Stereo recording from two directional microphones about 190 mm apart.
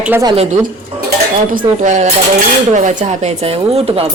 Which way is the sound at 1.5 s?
40° right (ahead or behind).